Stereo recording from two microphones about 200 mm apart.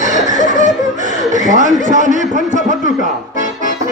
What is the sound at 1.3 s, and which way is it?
A man's voice, 40° right (ahead or behind).